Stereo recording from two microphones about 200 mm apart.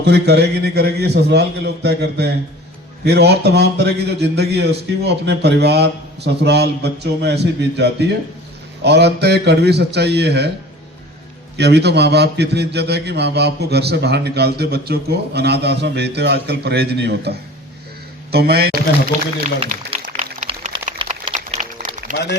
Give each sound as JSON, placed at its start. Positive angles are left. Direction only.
{"t": 0.0, "sound": "a man's voice", "side_deg": -55}
{"t": 11.5, "sound": "a man's voice", "side_deg": -55}
{"t": 19.7, "sound": "speech", "side_deg": -40}
{"t": 20.4, "sound": "a sound", "side_deg": -30}